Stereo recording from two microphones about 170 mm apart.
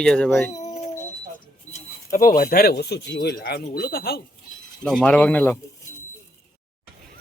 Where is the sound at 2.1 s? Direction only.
55° left (ahead or behind).